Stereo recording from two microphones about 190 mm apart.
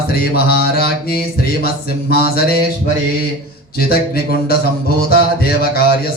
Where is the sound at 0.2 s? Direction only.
55° left (ahead or behind).